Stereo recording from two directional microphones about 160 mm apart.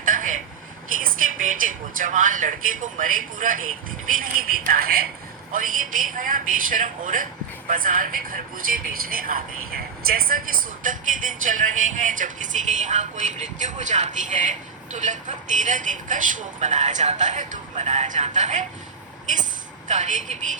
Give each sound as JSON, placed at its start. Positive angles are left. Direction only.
{"t": 0.0, "sound": "vehicle", "side_deg": -55}
{"t": 1.0, "sound": "a woman's voice", "side_deg": -55}
{"t": 19.9, "sound": "speech", "side_deg": -50}